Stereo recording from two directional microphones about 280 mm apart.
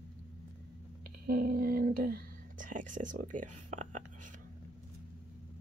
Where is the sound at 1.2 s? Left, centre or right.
Right.